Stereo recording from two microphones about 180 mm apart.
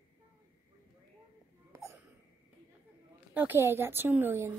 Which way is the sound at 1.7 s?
15° right (ahead or behind).